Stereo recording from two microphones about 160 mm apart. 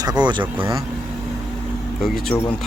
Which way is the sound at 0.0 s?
25° right (ahead or behind).